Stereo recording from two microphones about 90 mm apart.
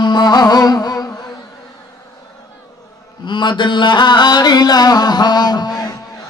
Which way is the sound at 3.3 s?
60° left (ahead or behind).